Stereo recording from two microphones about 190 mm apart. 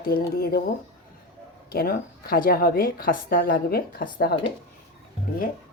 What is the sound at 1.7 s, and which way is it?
A woman's voice, 50° left (ahead or behind).